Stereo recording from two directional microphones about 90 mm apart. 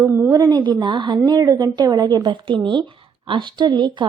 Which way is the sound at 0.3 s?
50° right (ahead or behind).